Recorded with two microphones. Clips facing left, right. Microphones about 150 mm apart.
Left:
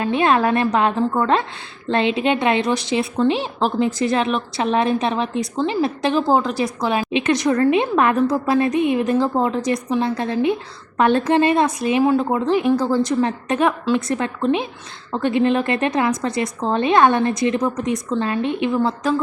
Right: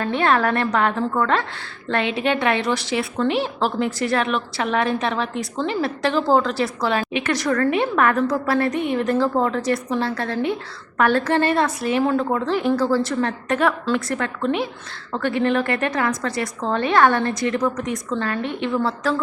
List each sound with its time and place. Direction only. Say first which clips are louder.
0.0 s a woman's voice: left 2 dB; 15° left (ahead or behind)